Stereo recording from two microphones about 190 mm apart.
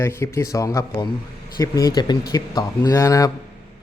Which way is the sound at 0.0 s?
15° left (ahead or behind).